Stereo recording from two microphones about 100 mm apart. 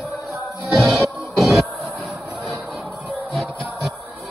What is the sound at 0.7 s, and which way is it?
Music, centre (ahead or behind).